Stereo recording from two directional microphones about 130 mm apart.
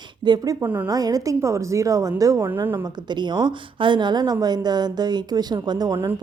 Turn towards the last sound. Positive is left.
turn(degrees=-30)  # may be behind; listen again after turning